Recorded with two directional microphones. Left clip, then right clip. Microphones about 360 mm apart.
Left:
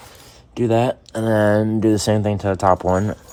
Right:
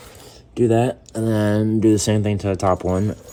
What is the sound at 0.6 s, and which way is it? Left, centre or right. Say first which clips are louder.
Speech: even; centre.